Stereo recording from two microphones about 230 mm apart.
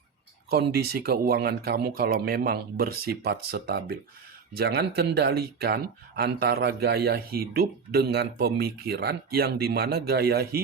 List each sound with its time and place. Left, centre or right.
0.5 s speech: right